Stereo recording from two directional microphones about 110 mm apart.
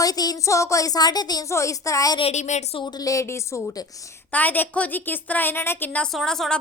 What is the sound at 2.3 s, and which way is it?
Speech, 90° left.